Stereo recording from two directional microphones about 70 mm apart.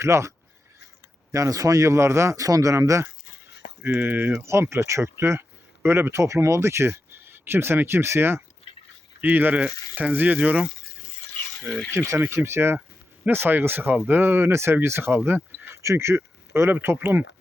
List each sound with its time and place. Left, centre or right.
0.0 s speech: right
3.8 s speech: right
4.4 s speech: right; by 10.7 s centre
11.9 s speech: right
15.7 s speech: right